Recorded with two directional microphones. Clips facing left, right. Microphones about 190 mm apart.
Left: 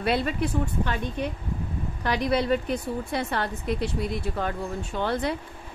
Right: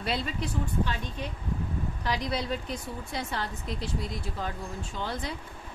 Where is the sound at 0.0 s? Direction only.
60° left (ahead or behind).